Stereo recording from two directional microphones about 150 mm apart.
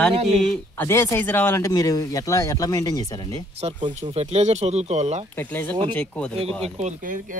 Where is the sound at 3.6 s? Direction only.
45° right (ahead or behind).